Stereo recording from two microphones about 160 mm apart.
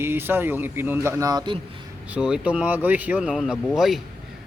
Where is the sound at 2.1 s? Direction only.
5° right (ahead or behind).